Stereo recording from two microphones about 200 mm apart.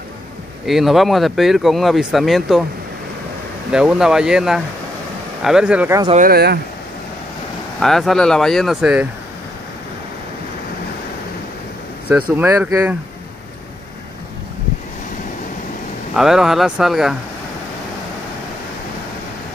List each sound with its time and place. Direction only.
0.7 s speech: centre (ahead or behind)
3.7 s speech: 5° right (ahead or behind)
6.1 s speech: 50° right (ahead or behind)
7.8 s speech: centre (ahead or behind)
12.1 s speech: 5° right (ahead or behind)
16.2 s speech: centre (ahead or behind)